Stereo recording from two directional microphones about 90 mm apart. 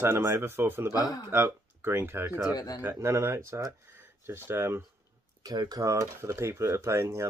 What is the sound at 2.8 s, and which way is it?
Speech, 30° right (ahead or behind).